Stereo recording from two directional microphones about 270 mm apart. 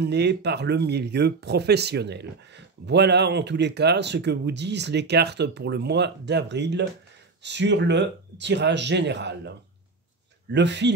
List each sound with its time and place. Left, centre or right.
0.0 s speech: right
10.5 s speech: right